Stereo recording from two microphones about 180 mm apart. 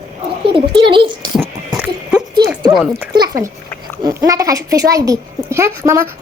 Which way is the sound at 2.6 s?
Centre (ahead or behind).